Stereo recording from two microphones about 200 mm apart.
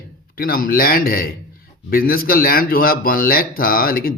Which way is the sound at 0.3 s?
45° left (ahead or behind).